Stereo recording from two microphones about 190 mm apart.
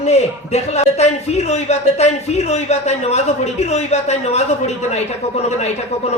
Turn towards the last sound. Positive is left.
turn(degrees=35)  # may be behind; listen again after turning